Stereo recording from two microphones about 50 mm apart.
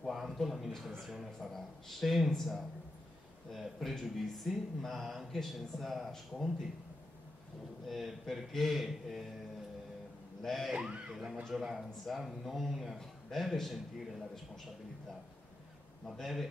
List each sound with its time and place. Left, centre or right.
0.0 s speech: centre
7.9 s speech: centre
10.4 s speech: centre
10.7 s speech: centre
11.1 s speech: centre
16.1 s speech: centre